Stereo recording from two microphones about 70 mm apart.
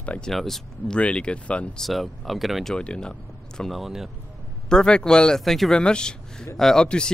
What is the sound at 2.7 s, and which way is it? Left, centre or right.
Speech, centre.